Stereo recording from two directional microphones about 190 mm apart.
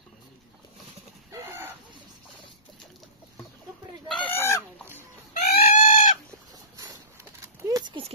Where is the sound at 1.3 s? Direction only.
10° right (ahead or behind).